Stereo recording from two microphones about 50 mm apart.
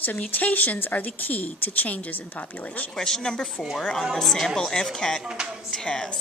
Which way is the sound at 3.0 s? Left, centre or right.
Centre.